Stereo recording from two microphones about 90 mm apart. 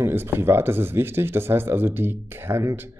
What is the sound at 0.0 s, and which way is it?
Speech, 25° right (ahead or behind).